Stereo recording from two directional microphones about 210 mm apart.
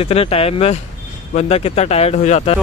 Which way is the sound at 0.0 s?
30° left (ahead or behind).